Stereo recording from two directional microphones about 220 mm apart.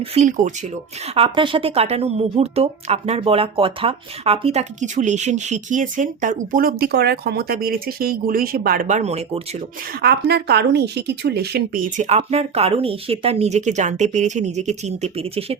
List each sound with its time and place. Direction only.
0.0 s speech: 30° right (ahead or behind)
10.0 s speech: 45° right (ahead or behind); by 15.5 s 25° right (ahead or behind)